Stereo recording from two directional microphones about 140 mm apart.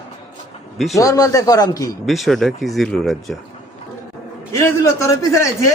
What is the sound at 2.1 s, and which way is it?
Speech, centre (ahead or behind).